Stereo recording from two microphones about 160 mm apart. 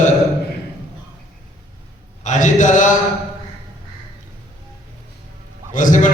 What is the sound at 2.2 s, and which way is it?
Speech, 50° left (ahead or behind).